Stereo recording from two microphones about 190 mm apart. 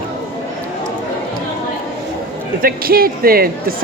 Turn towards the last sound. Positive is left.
turn(degrees=-50)  # may be behind; listen again after turning